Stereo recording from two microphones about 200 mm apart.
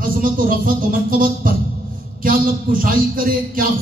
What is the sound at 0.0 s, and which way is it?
A man's voice, 45° right (ahead or behind).